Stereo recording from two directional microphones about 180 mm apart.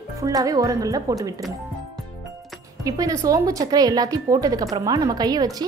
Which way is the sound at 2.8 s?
20° right (ahead or behind).